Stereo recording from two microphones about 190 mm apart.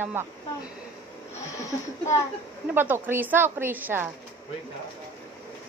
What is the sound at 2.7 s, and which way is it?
Speech, 10° right (ahead or behind).